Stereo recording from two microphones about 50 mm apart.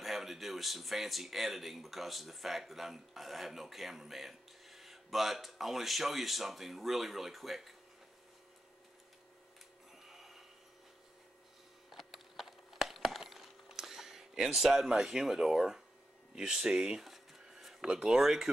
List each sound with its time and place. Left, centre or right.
0.0 s speech: centre
10.0 s printer: centre
11.9 s a sound: centre
16.3 s speech: centre
17.0 s a sound: centre
18.0 s speech: centre